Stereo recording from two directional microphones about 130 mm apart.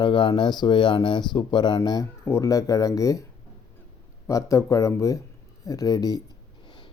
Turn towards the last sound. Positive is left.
turn(degrees=30)  # may be behind; listen again after turning